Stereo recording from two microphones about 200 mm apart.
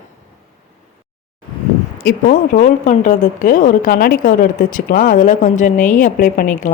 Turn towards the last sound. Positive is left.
turn(degrees=40)  # may be behind; listen again after turning